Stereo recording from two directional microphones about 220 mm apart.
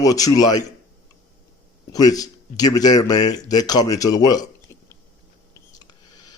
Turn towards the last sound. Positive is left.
turn(degrees=20)  # may be behind; listen again after turning